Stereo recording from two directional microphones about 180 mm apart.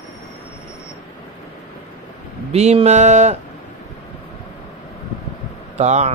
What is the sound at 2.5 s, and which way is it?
Music, 35° right (ahead or behind).